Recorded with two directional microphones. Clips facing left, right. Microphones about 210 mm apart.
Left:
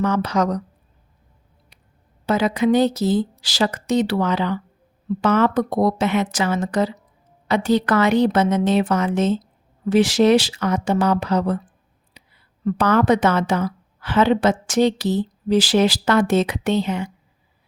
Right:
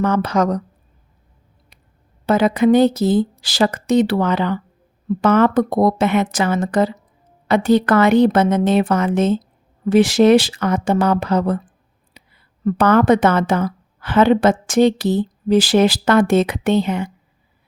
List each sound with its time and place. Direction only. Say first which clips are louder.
0.0 s speech: right 3 dB; 55° right (ahead or behind)
2.2 s a woman's voice: right 4 dB; 55° right (ahead or behind)
12.1 s a sound: right 2 dB; 55° right (ahead or behind)
12.6 s a woman's voice: right 4 dB; 55° right (ahead or behind)